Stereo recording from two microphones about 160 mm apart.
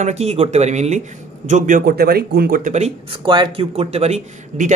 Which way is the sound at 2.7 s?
45° right (ahead or behind).